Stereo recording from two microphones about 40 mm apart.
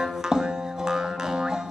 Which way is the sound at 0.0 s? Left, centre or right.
Centre.